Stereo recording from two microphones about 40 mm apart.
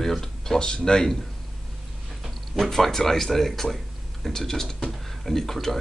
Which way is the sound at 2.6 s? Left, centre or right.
Centre.